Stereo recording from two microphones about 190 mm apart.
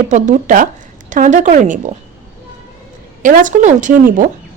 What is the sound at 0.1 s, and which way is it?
A woman's voice, 45° right (ahead or behind).